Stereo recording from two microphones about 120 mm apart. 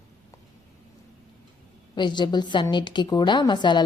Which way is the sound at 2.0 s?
40° left (ahead or behind).